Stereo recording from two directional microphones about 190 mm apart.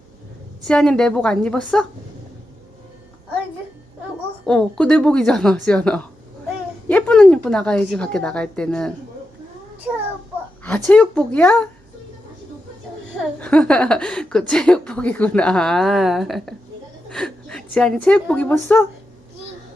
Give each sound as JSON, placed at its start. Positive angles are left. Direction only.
{"t": 0.7, "sound": "a woman's voice", "side_deg": 5}
{"t": 4.4, "sound": "a woman's voice", "side_deg": 5}
{"t": 10.6, "sound": "a woman's voice", "side_deg": 5}
{"t": 13.4, "sound": "a woman's voice", "side_deg": 5}